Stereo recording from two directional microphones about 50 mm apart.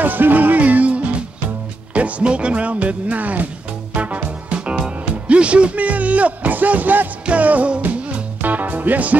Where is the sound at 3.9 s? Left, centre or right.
Right.